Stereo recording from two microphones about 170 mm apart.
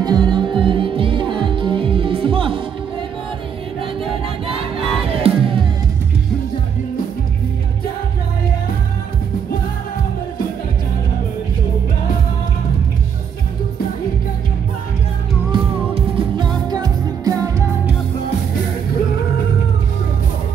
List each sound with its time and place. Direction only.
0.0 s music: 25° right (ahead or behind)
4.5 s crowd: 35° right (ahead or behind)
15.5 s music: 25° right (ahead or behind)